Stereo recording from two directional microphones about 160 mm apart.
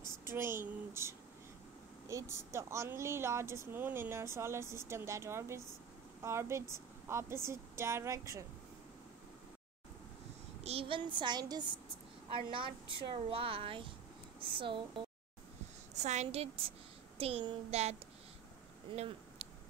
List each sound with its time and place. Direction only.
0.2 s speech: 15° right (ahead or behind)
10.6 s speech: 40° right (ahead or behind)
15.9 s a woman's voice: 45° right (ahead or behind)
18.9 s a sound: 40° right (ahead or behind)